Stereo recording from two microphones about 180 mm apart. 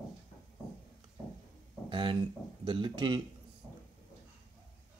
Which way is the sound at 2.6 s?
25° right (ahead or behind).